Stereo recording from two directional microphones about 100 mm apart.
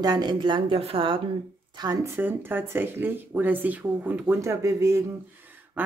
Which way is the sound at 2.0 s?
25° right (ahead or behind).